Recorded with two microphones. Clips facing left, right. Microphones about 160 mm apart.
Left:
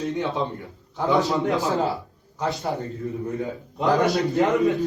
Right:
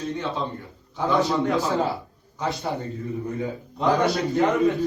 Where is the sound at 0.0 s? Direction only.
20° left (ahead or behind).